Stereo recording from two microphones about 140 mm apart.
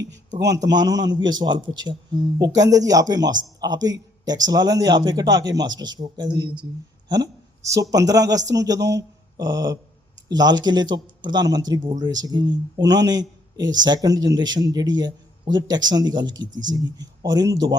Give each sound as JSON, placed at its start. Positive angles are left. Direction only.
{"t": 0.4, "sound": "speech", "side_deg": -25}
{"t": 7.1, "sound": "a man's voice", "side_deg": -25}